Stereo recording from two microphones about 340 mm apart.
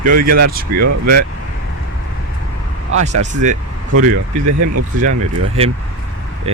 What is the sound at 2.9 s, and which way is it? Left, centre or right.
Speech, right.